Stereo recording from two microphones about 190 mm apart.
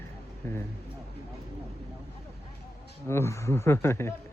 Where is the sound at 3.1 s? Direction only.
15° left (ahead or behind).